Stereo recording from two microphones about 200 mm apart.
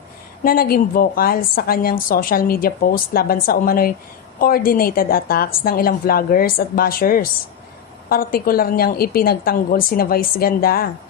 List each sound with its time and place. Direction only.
0.4 s a woman's voice: 50° left (ahead or behind)